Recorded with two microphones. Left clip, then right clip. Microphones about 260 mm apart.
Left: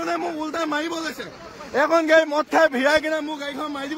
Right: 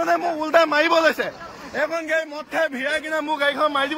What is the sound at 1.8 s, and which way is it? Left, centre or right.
A man's voice, centre.